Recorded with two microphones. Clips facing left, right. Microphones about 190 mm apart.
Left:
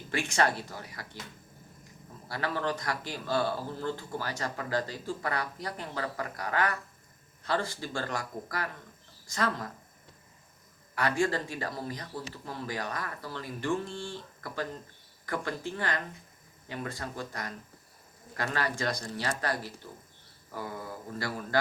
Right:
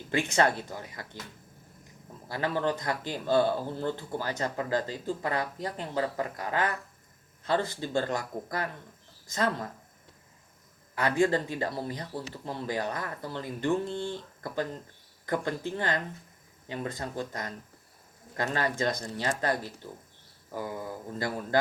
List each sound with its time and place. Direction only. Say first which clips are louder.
0.1 s speech: right 3 dB; 20° right (ahead or behind)
2.2 s speech: right 3 dB; 20° right (ahead or behind)
10.9 s speech: right 3 dB; 20° right (ahead or behind)